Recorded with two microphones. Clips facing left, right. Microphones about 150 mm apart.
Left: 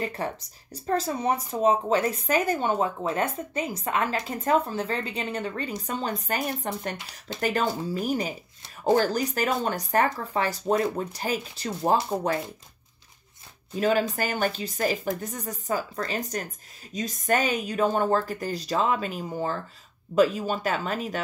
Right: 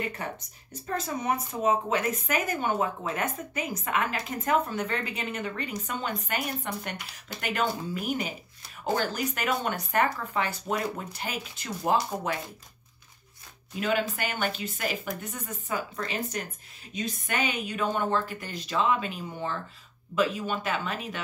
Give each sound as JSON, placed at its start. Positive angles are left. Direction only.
{"t": 0.0, "sound": "speech", "side_deg": 35}
{"t": 13.7, "sound": "speech", "side_deg": 35}